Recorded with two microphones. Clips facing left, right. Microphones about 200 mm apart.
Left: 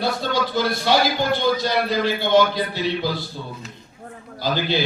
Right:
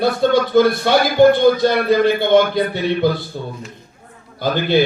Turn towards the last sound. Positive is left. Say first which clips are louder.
# right 6 dB
turn(degrees=-55)  # may be behind; listen again after turning